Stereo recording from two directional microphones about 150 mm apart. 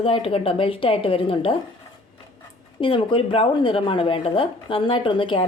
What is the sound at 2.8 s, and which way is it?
A woman's voice, 35° left (ahead or behind).